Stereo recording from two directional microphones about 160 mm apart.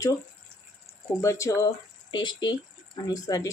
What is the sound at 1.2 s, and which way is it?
Speech, 20° left (ahead or behind).